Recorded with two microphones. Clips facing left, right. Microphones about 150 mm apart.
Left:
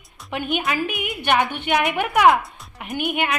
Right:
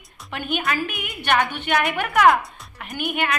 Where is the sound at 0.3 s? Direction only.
5° left (ahead or behind).